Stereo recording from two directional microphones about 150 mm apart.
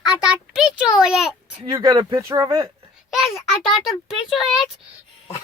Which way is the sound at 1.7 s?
25° right (ahead or behind).